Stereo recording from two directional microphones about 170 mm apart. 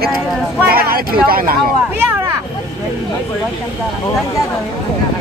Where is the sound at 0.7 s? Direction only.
60° right (ahead or behind).